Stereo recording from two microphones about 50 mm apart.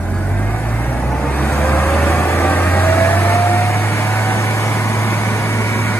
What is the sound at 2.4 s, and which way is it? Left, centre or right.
Vehicle, left.